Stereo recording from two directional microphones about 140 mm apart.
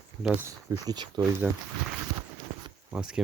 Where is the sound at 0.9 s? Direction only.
30° right (ahead or behind).